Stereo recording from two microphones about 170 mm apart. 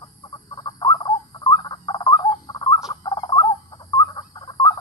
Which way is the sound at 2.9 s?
25° left (ahead or behind).